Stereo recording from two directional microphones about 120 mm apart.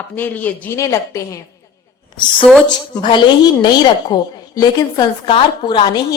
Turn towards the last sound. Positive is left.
turn(degrees=35)  # may be behind; listen again after turning